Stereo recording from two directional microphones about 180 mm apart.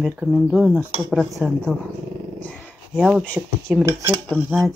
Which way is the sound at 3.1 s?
5° left (ahead or behind).